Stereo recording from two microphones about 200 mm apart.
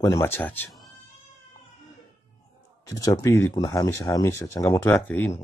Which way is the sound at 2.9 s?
15° left (ahead or behind).